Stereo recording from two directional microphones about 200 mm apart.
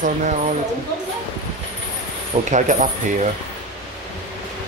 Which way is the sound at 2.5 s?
35° right (ahead or behind).